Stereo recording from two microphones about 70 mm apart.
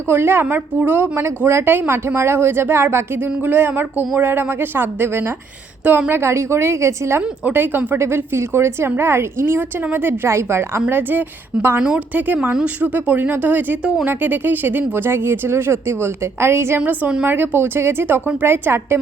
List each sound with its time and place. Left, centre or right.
0.1 s a woman's voice: right
7.2 s a woman's voice: right
7.9 s speech: right
11.8 s a woman's voice: centre
12.1 s a woman's voice: right
16.8 s a woman's voice: right
17.2 s a woman's voice: right